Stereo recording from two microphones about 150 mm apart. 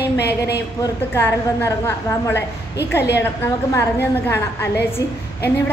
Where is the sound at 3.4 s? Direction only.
15° left (ahead or behind).